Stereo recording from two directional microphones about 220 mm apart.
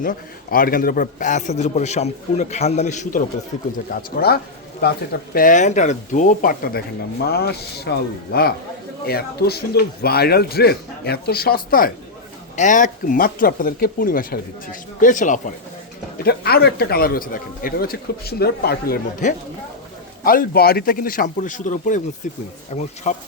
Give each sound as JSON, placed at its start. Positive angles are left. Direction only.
{"t": 0.0, "sound": "a man's voice", "side_deg": 40}
{"t": 3.9, "sound": "a man's voice", "side_deg": 45}